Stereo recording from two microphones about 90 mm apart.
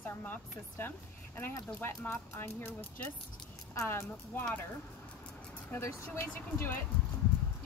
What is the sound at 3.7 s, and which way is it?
Speech, 30° left (ahead or behind).